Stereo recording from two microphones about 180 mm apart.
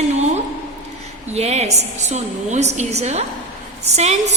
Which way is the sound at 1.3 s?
35° right (ahead or behind).